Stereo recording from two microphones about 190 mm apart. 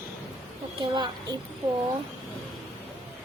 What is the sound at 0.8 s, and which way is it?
Speech, 25° right (ahead or behind).